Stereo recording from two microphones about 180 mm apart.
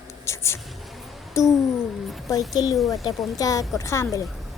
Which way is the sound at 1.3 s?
15° left (ahead or behind).